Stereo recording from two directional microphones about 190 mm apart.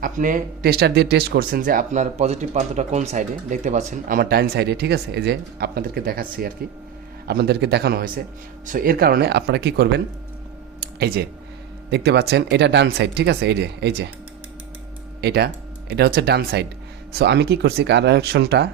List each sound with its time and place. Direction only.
0.0 s speech: 45° right (ahead or behind); by 10.0 s 60° right (ahead or behind)
10.8 s a sound: 55° right (ahead or behind)
11.9 s speech: 60° right (ahead or behind)
15.2 s speech: 60° right (ahead or behind)